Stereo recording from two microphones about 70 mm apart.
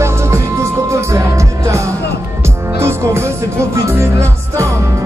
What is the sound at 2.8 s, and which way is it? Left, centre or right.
Music, right.